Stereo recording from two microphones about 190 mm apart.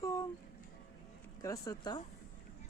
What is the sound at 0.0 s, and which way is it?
Music, 15° left (ahead or behind).